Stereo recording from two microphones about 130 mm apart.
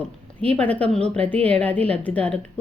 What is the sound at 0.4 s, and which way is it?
A woman's voice, 10° left (ahead or behind).